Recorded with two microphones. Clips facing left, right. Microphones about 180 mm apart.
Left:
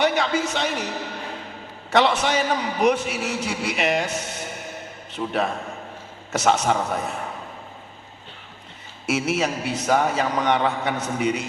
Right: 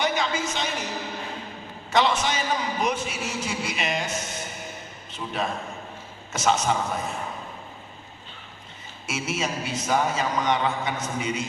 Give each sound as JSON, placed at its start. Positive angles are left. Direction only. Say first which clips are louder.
{"t": 0.0, "sound": "a sound", "louder": "left 5 dB", "side_deg": 65}
{"t": 1.9, "sound": "a man's voice", "louder": "left 3 dB", "side_deg": 65}
{"t": 9.0, "sound": "a man's voice", "louder": "left 6 dB", "side_deg": 65}